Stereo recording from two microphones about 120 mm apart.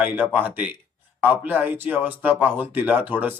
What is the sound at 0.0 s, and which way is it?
A man's voice, 15° right (ahead or behind).